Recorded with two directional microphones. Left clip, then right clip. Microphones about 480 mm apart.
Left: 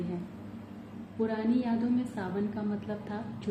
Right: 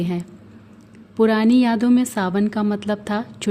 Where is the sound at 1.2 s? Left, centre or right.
Right.